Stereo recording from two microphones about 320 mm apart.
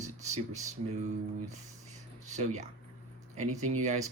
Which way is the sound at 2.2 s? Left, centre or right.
Right.